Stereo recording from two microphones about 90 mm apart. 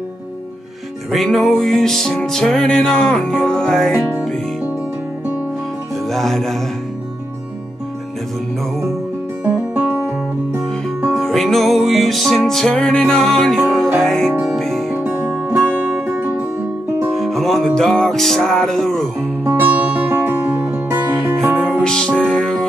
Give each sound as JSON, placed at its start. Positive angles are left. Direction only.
{"t": 1.1, "sound": "music", "side_deg": 5}
{"t": 6.0, "sound": "music", "side_deg": 5}
{"t": 9.4, "sound": "music", "side_deg": -20}
{"t": 11.1, "sound": "music", "side_deg": 5}
{"t": 14.9, "sound": "music", "side_deg": -20}
{"t": 17.1, "sound": "music", "side_deg": 0}
{"t": 19.4, "sound": "music", "side_deg": -25}
{"t": 21.8, "sound": "music", "side_deg": 10}